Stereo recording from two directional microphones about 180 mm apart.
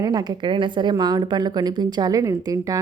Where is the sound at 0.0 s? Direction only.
20° right (ahead or behind).